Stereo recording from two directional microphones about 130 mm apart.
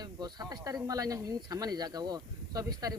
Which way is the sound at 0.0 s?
30° right (ahead or behind).